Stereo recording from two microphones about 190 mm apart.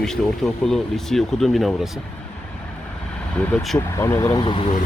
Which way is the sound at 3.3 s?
5° left (ahead or behind).